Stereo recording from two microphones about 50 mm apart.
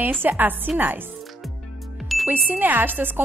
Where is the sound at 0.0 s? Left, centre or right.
Right.